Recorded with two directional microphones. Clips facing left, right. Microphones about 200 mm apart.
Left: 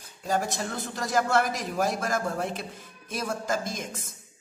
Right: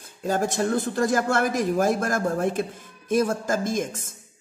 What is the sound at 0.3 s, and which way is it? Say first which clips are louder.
A woman's voice: right 6 dB; 50° right (ahead or behind).